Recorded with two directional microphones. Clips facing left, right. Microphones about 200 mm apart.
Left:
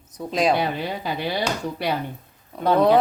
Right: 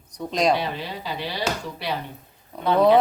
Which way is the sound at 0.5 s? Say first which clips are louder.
Left 4 dB; 50° left (ahead or behind).